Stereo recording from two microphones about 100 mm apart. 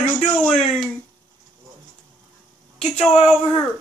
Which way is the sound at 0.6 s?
Centre (ahead or behind).